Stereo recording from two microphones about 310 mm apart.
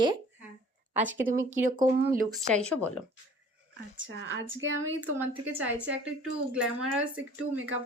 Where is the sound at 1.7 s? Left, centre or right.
Right.